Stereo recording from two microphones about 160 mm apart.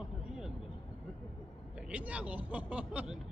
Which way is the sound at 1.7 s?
10° right (ahead or behind).